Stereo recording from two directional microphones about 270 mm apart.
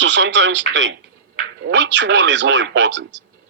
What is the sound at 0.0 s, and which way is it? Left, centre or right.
Speech, right.